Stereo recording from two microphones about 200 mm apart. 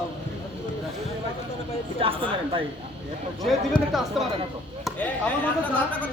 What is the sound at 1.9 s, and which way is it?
Speech, 30° right (ahead or behind).